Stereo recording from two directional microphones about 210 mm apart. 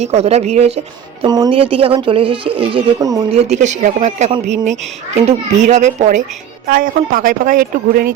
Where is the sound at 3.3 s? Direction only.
30° right (ahead or behind).